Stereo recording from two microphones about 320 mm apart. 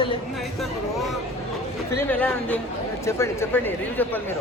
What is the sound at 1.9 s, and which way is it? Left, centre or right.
Speech, centre.